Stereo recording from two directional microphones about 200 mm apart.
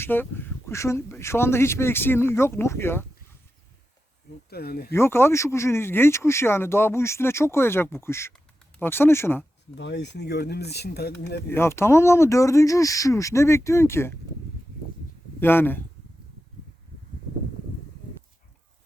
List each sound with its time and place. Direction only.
0.0 s speech: 10° left (ahead or behind)
4.4 s speech: 50° left (ahead or behind)
4.9 s speech: 10° left (ahead or behind)
9.7 s speech: 60° left (ahead or behind)
11.4 s speech: 10° left (ahead or behind)
15.4 s speech: 10° left (ahead or behind)